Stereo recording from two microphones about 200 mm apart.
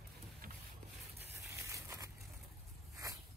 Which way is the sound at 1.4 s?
15° right (ahead or behind).